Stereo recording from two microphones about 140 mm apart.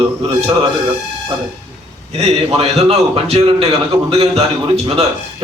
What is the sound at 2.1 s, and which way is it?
A man's voice, 45° right (ahead or behind).